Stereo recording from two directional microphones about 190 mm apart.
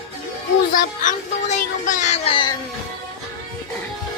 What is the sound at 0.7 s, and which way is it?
Speech, 40° left (ahead or behind).